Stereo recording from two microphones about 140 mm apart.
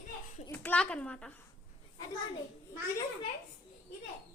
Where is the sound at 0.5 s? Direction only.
10° left (ahead or behind).